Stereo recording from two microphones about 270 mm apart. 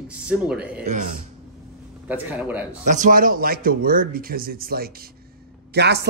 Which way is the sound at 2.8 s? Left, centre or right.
Right.